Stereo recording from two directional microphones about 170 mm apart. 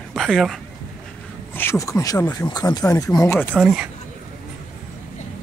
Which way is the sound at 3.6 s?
5° right (ahead or behind).